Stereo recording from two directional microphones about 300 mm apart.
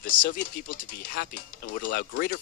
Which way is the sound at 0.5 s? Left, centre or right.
Left.